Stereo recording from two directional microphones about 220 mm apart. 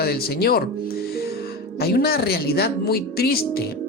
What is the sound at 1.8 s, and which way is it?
Speech, 45° left (ahead or behind).